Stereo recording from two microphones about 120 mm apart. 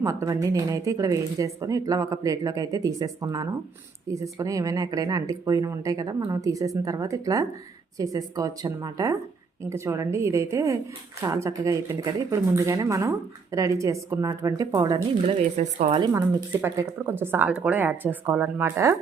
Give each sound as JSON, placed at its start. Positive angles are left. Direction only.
{"t": 0.0, "sound": "speech", "side_deg": -25}
{"t": 15.4, "sound": "speech", "side_deg": -80}
{"t": 16.6, "sound": "speech", "side_deg": -20}